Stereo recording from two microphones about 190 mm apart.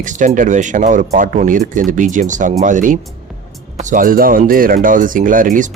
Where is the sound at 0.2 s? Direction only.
40° right (ahead or behind).